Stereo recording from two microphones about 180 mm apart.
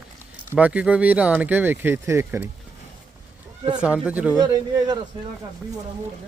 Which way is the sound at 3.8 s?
5° right (ahead or behind).